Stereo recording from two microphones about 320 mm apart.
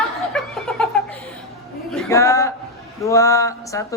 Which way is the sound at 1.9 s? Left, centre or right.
Centre.